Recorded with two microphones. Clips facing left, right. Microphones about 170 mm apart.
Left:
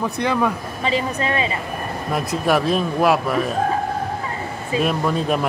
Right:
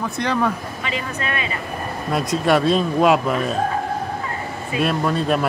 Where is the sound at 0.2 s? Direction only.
10° left (ahead or behind).